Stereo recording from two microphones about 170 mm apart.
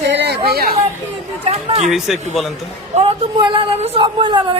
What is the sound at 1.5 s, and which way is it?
Speech, 35° right (ahead or behind).